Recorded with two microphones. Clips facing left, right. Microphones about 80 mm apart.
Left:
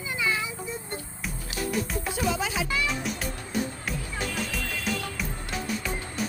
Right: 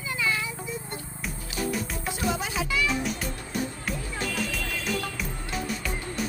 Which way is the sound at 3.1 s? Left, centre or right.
Centre.